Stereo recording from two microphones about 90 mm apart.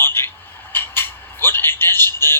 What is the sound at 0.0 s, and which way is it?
Telephone, 25° left (ahead or behind).